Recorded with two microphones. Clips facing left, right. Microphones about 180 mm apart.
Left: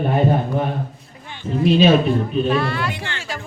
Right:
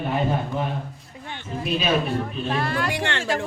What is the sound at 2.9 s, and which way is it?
Speech, 65° right (ahead or behind).